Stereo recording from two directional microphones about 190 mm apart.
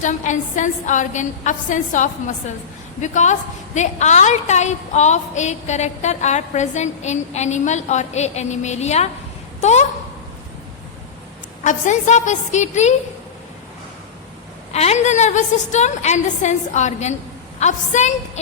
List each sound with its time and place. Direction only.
0.0 s a woman's voice: 40° left (ahead or behind)
11.6 s a woman's voice: 40° left (ahead or behind)
14.7 s a woman's voice: 35° left (ahead or behind)